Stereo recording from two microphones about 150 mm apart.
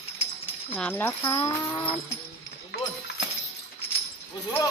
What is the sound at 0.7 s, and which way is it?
Speech, 10° left (ahead or behind).